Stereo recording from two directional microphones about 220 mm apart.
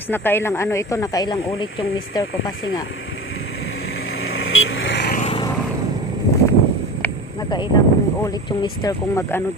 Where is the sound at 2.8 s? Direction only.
60° left (ahead or behind).